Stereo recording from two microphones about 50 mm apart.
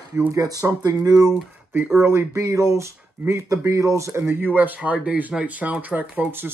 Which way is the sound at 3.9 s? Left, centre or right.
Right.